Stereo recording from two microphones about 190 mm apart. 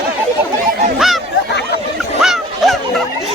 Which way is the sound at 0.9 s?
Centre (ahead or behind).